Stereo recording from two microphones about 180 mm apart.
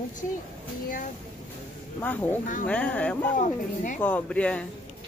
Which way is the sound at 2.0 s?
10° left (ahead or behind).